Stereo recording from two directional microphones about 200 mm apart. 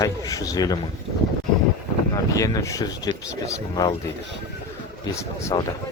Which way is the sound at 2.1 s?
15° left (ahead or behind).